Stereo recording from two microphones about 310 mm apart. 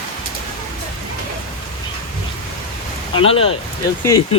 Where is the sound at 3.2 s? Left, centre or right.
Centre.